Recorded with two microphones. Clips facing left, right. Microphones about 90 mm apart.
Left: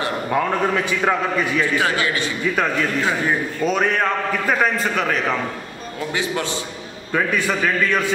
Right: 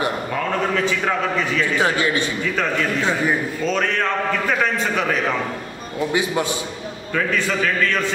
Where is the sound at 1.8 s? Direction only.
20° right (ahead or behind).